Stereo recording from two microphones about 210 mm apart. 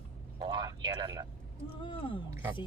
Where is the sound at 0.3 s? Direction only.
20° right (ahead or behind).